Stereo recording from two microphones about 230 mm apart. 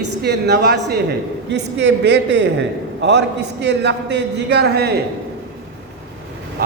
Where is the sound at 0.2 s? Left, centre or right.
Right.